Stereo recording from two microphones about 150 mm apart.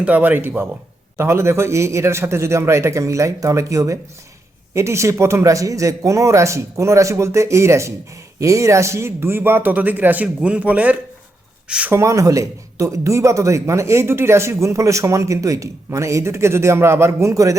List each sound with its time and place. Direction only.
0.0 s speech: 10° right (ahead or behind)